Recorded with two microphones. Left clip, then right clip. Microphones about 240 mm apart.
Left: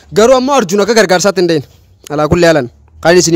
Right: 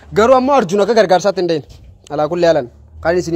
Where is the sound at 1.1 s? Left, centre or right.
Left.